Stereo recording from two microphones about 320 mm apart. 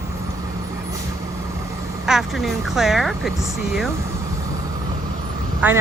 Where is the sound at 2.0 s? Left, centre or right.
Centre.